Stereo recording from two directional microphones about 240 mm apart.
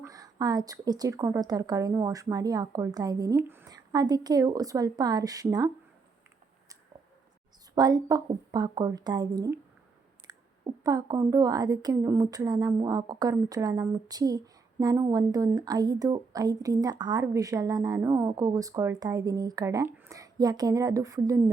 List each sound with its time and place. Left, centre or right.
0.0 s a woman's voice: centre
7.8 s a woman's voice: centre